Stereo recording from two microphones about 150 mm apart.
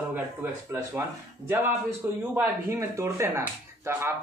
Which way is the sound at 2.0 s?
15° right (ahead or behind).